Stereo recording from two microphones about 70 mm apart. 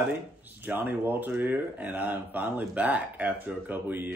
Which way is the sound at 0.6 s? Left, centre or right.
Right.